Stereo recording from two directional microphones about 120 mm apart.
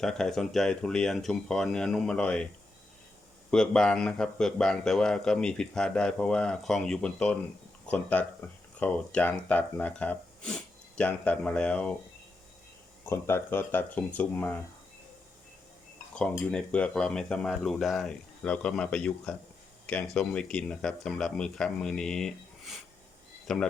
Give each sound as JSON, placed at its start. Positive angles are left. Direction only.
{"t": 0.0, "sound": "a man's voice", "side_deg": 5}
{"t": 3.5, "sound": "a man's voice", "side_deg": 5}
{"t": 13.1, "sound": "speech", "side_deg": 20}
{"t": 16.5, "sound": "a man's voice", "side_deg": 10}